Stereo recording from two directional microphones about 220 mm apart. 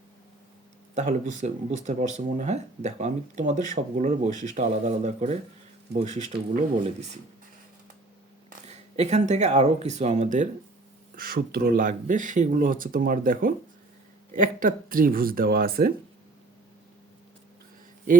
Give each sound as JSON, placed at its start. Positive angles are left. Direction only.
{"t": 0.9, "sound": "speech", "side_deg": -35}
{"t": 8.4, "sound": "speech", "side_deg": -30}